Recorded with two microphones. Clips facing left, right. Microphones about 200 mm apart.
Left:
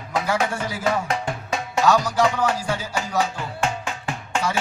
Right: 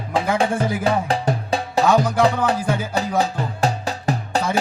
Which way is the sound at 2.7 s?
55° right (ahead or behind).